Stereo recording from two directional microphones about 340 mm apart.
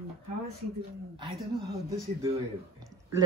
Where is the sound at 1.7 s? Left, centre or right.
Centre.